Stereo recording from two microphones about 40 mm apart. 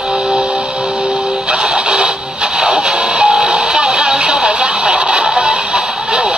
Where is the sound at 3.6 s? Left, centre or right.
Centre.